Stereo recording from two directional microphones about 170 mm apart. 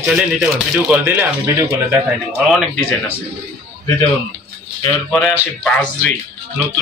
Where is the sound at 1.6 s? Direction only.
20° right (ahead or behind).